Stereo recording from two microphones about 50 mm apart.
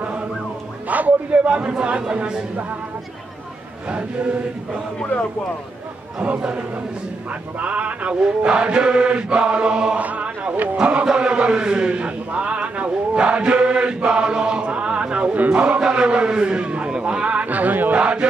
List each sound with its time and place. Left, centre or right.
0.8 s mantra: right
3.9 s mantra: right
6.1 s mantra: right
10.0 s a sound: right
10.8 s mantra: right
11.1 s speech: centre; by 17.9 s right
17.9 s mantra: right